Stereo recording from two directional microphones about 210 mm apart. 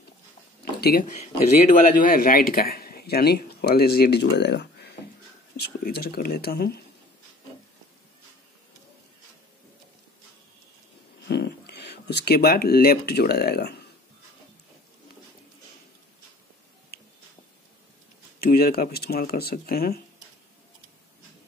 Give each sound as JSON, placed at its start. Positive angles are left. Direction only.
{"t": 0.7, "sound": "speech", "side_deg": 50}
{"t": 1.2, "sound": "a man's voice", "side_deg": 35}
{"t": 11.2, "sound": "speech", "side_deg": 55}
{"t": 18.4, "sound": "a man's voice", "side_deg": 45}